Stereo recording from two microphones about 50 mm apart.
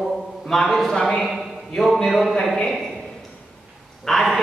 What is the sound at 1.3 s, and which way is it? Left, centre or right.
Speech, centre.